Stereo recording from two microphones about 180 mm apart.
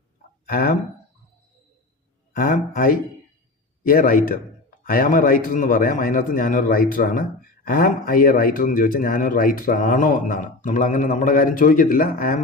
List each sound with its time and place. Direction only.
0.4 s speech: 55° left (ahead or behind)
2.3 s a man's voice: 50° left (ahead or behind)